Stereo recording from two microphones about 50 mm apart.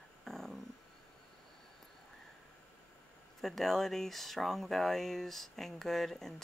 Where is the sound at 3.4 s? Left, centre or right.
Centre.